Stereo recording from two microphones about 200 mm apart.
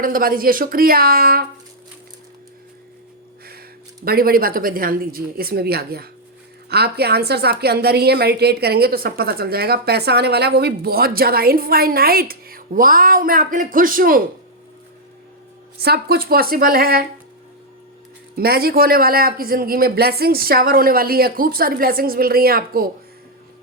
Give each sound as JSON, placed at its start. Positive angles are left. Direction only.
{"t": 0.0, "sound": "a woman's voice", "side_deg": -45}
{"t": 4.0, "sound": "a woman's voice", "side_deg": -50}
{"t": 15.8, "sound": "a woman's voice", "side_deg": -50}
{"t": 18.3, "sound": "a woman's voice", "side_deg": -50}